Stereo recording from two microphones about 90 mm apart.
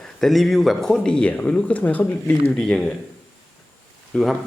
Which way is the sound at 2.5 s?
10° left (ahead or behind).